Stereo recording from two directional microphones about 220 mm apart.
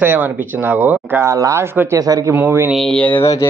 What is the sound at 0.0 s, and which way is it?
A man's voice, 10° right (ahead or behind).